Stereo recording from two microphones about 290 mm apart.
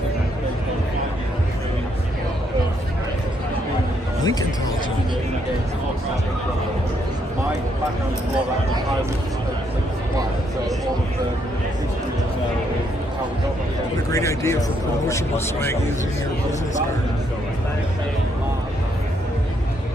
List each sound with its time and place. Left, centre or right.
4.2 s speech: centre
14.1 s speech: centre